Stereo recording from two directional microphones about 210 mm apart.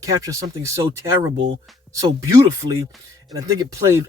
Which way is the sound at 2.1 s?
15° right (ahead or behind).